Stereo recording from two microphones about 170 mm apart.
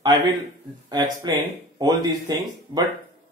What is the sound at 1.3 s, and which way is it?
Speech, 25° right (ahead or behind).